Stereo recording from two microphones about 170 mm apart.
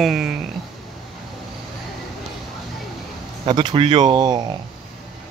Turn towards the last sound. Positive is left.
turn(degrees=-25)  # may be behind; listen again after turning